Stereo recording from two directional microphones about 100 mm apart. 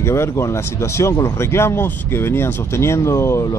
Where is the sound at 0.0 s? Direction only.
25° left (ahead or behind).